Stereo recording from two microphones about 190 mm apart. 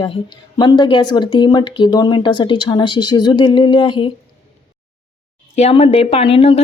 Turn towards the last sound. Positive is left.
turn(degrees=30)  # may be behind; listen again after turning